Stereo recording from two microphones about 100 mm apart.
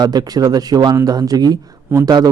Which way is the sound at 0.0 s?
45° right (ahead or behind).